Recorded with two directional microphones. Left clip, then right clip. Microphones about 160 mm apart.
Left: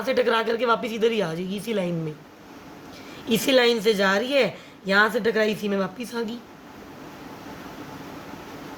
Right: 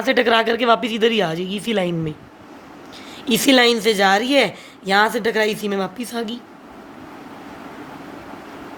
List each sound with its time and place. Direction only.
0.0 s a woman's voice: 40° right (ahead or behind)
3.2 s a woman's voice: 40° right (ahead or behind)